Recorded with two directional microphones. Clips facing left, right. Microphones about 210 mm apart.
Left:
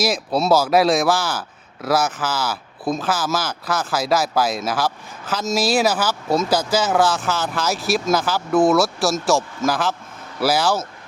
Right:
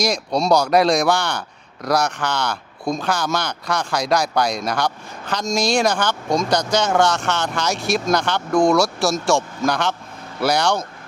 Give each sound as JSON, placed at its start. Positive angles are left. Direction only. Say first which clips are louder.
{"t": 0.0, "sound": "speech", "louder": "even", "side_deg": 5}